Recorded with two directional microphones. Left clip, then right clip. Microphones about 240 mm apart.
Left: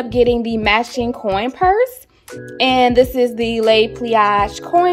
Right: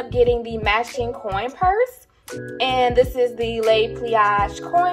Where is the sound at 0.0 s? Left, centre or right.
Left.